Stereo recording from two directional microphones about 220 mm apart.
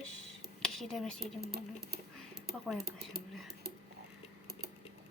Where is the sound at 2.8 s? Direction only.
45° right (ahead or behind).